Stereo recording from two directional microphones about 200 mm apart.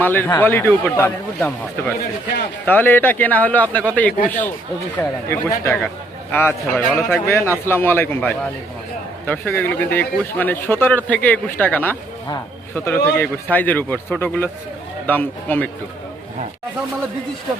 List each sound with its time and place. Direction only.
0.0 s speech: 10° left (ahead or behind)
2.6 s speech: 10° left (ahead or behind)